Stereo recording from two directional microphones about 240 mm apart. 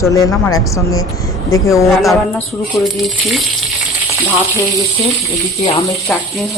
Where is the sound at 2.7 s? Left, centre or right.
Centre.